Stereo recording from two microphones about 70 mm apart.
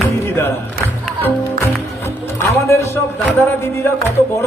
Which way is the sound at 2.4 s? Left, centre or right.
Left.